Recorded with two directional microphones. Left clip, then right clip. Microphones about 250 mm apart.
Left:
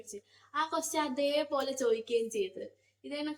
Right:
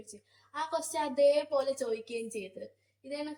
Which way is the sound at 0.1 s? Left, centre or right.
Centre.